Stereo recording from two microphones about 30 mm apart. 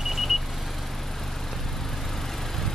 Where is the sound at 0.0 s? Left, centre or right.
Centre.